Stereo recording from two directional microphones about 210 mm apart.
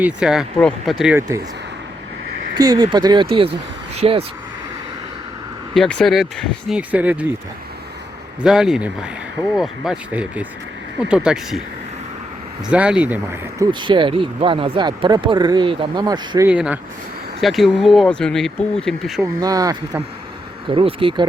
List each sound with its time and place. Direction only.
0.0 s speech: 5° right (ahead or behind)
2.6 s speech: 20° right (ahead or behind)
5.7 s speech: 5° left (ahead or behind)
8.4 s speech: centre (ahead or behind)
12.7 s speech: 5° right (ahead or behind)
13.7 s speech: 25° right (ahead or behind)
16.5 s speech: 5° right (ahead or behind)
19.4 s speech: 15° right (ahead or behind)